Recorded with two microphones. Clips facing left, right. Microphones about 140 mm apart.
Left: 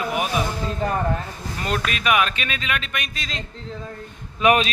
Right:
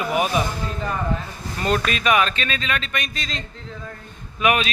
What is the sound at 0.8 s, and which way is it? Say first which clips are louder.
Speech: left 4 dB; 45° left (ahead or behind).